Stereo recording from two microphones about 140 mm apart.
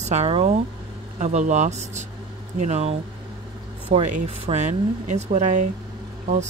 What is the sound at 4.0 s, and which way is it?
Speech, 55° right (ahead or behind).